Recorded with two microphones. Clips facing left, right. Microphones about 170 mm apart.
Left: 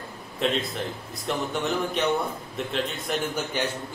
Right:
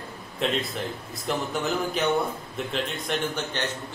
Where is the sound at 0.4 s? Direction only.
Centre (ahead or behind).